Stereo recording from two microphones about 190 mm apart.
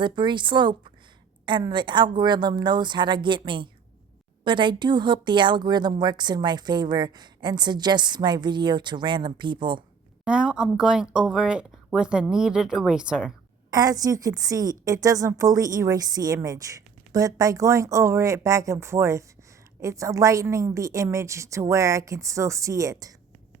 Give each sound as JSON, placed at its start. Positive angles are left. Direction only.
{"t": 0.0, "sound": "a woman's voice", "side_deg": -25}
{"t": 10.2, "sound": "speech", "side_deg": -5}
{"t": 13.7, "sound": "a woman's voice", "side_deg": -20}